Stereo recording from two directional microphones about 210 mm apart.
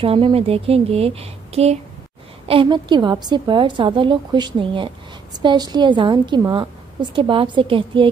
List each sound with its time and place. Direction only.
0.0 s a woman's voice: 25° right (ahead or behind)